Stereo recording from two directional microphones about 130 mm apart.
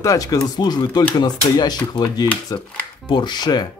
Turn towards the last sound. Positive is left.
turn(degrees=35)  # may be behind; listen again after turning